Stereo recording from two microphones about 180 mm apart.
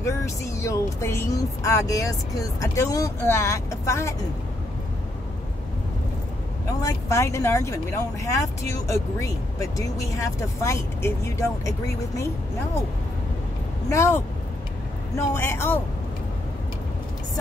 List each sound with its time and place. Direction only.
0.0 s speech: 15° left (ahead or behind)
6.8 s speech: 15° left (ahead or behind)
13.8 s speech: 15° left (ahead or behind)